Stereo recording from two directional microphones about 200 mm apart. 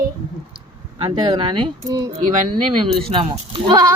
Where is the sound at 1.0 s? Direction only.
25° right (ahead or behind).